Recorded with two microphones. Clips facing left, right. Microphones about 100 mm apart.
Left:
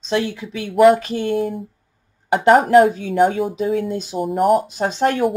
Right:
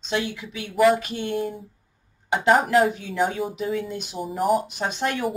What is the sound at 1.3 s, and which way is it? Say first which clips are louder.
Speech: left 6 dB; centre (ahead or behind).